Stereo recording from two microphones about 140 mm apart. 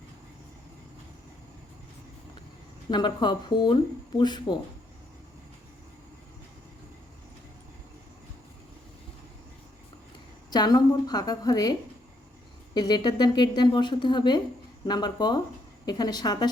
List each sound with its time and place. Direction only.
2.9 s a woman's voice: 30° left (ahead or behind)
10.5 s a woman's voice: 30° left (ahead or behind)